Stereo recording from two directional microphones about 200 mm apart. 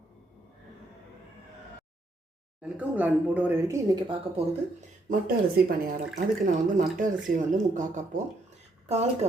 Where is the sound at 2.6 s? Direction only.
5° right (ahead or behind).